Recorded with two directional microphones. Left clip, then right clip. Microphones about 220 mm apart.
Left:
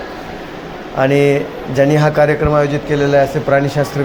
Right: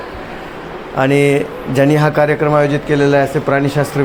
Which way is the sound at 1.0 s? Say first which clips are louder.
Even; 40° right (ahead or behind).